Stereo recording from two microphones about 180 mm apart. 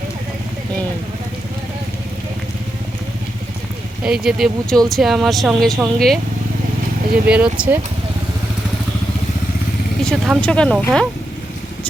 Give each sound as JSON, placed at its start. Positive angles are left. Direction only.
{"t": 4.0, "sound": "speech", "side_deg": -5}
{"t": 7.3, "sound": "speech", "side_deg": -5}
{"t": 10.0, "sound": "speech", "side_deg": 5}